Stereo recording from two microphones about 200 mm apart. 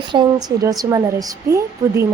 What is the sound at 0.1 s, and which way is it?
Speech, 20° right (ahead or behind).